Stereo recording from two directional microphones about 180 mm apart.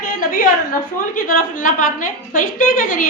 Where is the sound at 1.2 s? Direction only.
50° left (ahead or behind).